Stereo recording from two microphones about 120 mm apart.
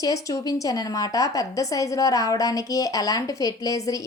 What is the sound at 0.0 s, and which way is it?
A woman's voice, 25° left (ahead or behind).